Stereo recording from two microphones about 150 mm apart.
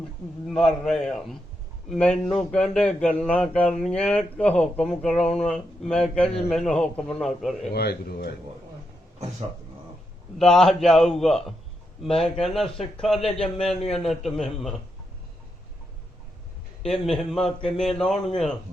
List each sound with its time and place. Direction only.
0.4 s speech: centre (ahead or behind)
7.7 s speech: 90° left
10.3 s speech: 5° left (ahead or behind)
16.8 s speech: centre (ahead or behind)